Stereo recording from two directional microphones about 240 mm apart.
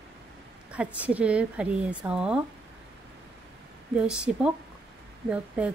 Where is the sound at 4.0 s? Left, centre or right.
Centre.